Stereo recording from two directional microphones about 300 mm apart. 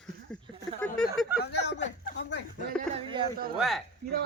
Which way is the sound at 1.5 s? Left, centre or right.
Left.